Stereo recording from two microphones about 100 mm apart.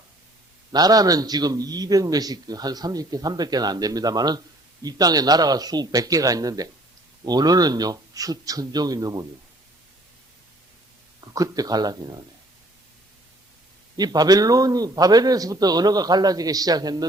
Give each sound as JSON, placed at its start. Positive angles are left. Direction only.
{"t": 0.7, "sound": "a man's voice", "side_deg": -40}
{"t": 11.3, "sound": "a man's voice", "side_deg": -40}
{"t": 13.9, "sound": "a man's voice", "side_deg": -40}